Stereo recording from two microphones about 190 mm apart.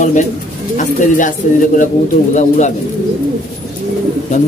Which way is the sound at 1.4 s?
45° left (ahead or behind).